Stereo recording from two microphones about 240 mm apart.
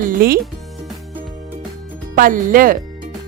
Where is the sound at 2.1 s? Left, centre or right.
Right.